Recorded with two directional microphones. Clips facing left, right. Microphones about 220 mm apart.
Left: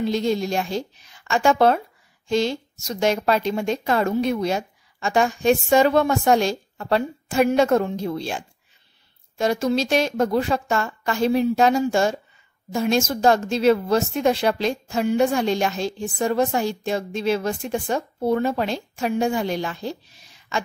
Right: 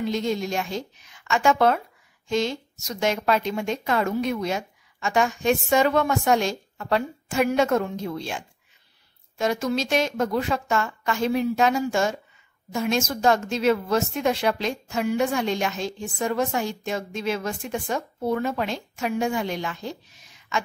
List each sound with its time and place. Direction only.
0.0 s a woman's voice: 35° left (ahead or behind)